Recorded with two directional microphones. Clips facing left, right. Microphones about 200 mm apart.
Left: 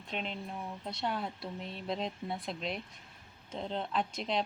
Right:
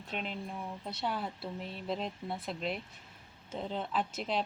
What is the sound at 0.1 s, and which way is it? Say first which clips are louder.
Speech: even; 5° right (ahead or behind).